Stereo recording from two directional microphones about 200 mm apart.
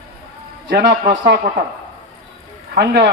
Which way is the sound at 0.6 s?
60° right (ahead or behind).